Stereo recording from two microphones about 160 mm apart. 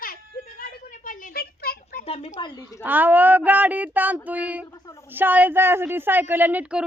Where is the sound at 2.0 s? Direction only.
40° left (ahead or behind).